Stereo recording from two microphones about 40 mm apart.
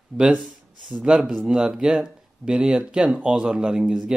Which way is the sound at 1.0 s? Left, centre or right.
Right.